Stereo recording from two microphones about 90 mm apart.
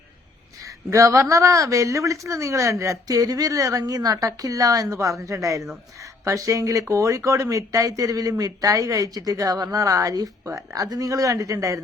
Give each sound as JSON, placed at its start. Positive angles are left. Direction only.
{"t": 0.6, "sound": "speech", "side_deg": -35}